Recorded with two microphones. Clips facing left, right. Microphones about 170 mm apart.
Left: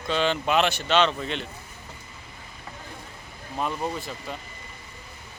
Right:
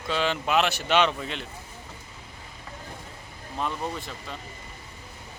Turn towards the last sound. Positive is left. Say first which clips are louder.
# left 3 dB
turn(degrees=5)  # may be behind; listen again after turning